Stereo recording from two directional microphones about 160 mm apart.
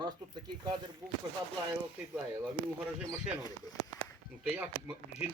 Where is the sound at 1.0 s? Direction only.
20° right (ahead or behind).